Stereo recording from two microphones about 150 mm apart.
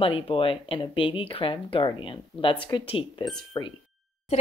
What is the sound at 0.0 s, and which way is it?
Speech, 35° left (ahead or behind).